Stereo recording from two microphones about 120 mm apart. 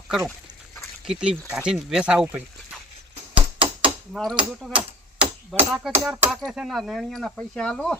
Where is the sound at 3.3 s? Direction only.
50° right (ahead or behind).